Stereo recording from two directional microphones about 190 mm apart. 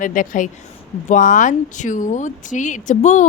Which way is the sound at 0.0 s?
45° left (ahead or behind).